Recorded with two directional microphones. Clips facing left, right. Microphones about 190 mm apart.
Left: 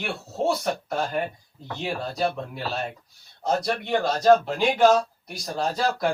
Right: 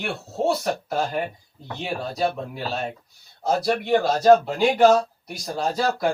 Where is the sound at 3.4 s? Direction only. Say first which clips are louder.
Right 3 dB; 5° right (ahead or behind).